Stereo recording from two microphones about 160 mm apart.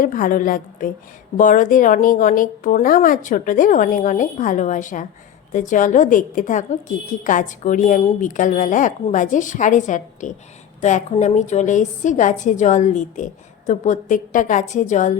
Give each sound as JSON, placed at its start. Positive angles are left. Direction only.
{"t": 0.0, "sound": "a woman's voice", "side_deg": 60}